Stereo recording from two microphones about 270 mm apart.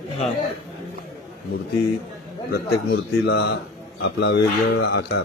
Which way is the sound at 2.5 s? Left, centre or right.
Left.